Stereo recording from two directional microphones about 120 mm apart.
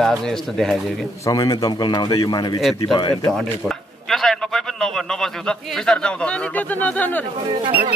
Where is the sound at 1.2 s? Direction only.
30° left (ahead or behind).